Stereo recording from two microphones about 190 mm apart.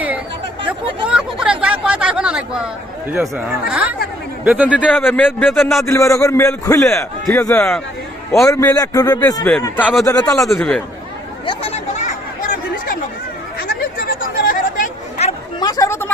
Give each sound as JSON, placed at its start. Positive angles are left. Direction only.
{"t": 0.7, "sound": "chatter", "side_deg": -5}
{"t": 3.1, "sound": "speech", "side_deg": -10}
{"t": 4.9, "sound": "a man's voice", "side_deg": 10}
{"t": 9.4, "sound": "speech", "side_deg": 5}
{"t": 10.1, "sound": "a man's voice", "side_deg": 15}
{"t": 10.5, "sound": "a man's voice", "side_deg": 5}
{"t": 11.4, "sound": "chatter", "side_deg": 30}
{"t": 13.6, "sound": "chatter", "side_deg": 50}
{"t": 15.6, "sound": "chatter", "side_deg": 20}